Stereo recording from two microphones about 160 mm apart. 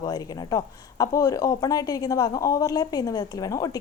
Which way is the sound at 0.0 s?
25° left (ahead or behind).